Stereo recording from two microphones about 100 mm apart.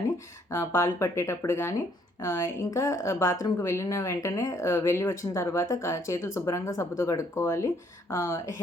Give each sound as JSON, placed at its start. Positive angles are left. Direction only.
{"t": 0.5, "sound": "a woman's voice", "side_deg": 30}